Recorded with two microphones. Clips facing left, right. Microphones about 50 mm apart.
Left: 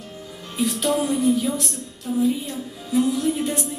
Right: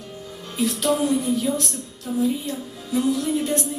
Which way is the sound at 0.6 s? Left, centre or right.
Centre.